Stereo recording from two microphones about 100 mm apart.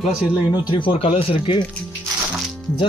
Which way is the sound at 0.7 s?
60° left (ahead or behind).